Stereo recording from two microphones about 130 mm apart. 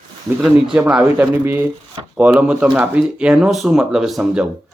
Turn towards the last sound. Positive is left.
turn(degrees=-5)  # may be behind; listen again after turning